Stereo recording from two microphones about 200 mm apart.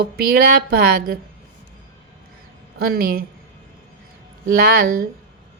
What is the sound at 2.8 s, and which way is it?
Speech, 50° right (ahead or behind).